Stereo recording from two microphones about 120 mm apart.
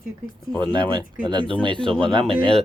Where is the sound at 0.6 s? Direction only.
40° right (ahead or behind).